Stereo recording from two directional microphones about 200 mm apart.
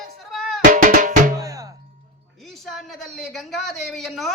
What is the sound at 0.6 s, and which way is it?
Music, 40° right (ahead or behind).